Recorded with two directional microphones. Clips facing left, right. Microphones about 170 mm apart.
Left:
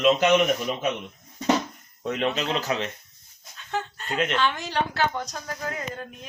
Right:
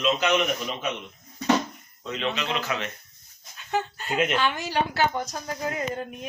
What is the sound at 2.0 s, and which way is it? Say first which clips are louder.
Speech: left 6 dB; 55° left (ahead or behind).